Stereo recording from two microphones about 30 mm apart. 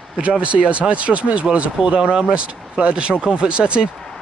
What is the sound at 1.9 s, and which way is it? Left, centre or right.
Speech, right.